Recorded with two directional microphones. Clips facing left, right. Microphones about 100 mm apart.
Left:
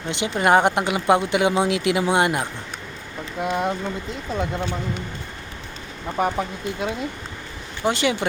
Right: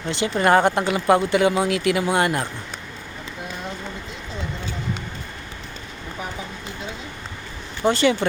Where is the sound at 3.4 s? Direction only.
65° left (ahead or behind).